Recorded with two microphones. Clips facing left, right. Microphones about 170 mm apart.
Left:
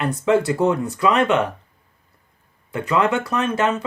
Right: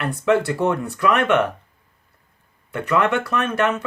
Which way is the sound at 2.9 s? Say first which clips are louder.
Even; 20° left (ahead or behind).